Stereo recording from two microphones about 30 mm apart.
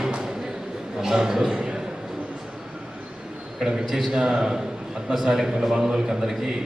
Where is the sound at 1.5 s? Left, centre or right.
Right.